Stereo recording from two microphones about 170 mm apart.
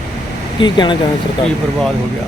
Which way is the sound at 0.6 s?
25° left (ahead or behind).